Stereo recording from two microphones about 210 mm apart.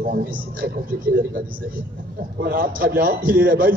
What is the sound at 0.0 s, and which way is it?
Speech, 40° right (ahead or behind).